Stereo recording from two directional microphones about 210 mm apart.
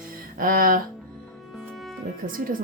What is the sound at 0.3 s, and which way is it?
Speech, 40° right (ahead or behind).